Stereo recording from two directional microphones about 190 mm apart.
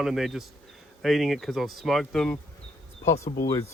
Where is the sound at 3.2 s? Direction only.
35° left (ahead or behind).